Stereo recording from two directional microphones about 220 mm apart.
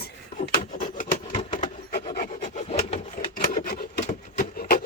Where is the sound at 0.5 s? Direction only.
40° left (ahead or behind).